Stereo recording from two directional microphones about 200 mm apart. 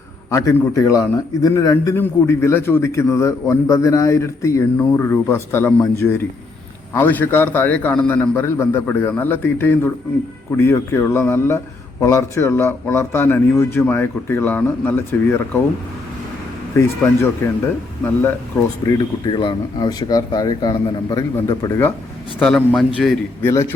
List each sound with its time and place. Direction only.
0.3 s speech: 15° left (ahead or behind)
16.7 s speech: 10° left (ahead or behind)
19.3 s a man's voice: 25° left (ahead or behind)
22.4 s a man's voice: 5° left (ahead or behind)